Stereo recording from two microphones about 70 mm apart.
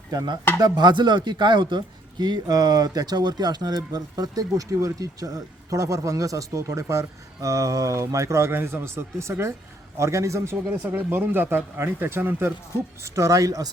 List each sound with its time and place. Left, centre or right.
0.1 s chopping: right
0.6 s a man's voice: right
10.7 s speech: right
13.1 s a man's voice: right